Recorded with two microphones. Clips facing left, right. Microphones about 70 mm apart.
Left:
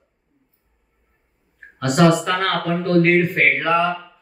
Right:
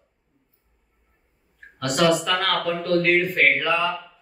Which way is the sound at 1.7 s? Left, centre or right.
Left.